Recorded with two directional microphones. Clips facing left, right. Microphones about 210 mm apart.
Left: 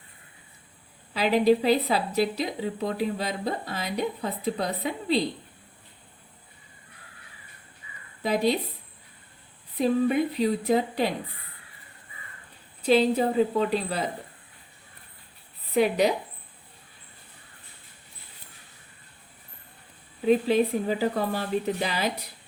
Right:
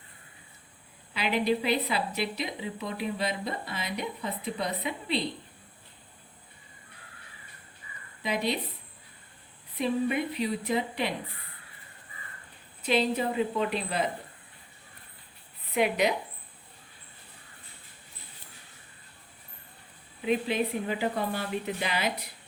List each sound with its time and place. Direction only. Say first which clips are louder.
1.1 s a woman's voice: left 6 dB; 40° left (ahead or behind)
8.2 s a woman's voice: left 6 dB; 40° left (ahead or behind)
9.7 s a woman's voice: left 5 dB; 35° left (ahead or behind)
12.9 s a woman's voice: left 5 dB; 35° left (ahead or behind)
15.7 s a woman's voice: left 4 dB; 35° left (ahead or behind)
20.2 s a woman's voice: left 6 dB; 35° left (ahead or behind)